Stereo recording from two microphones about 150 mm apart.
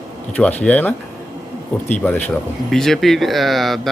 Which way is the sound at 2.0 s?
10° left (ahead or behind).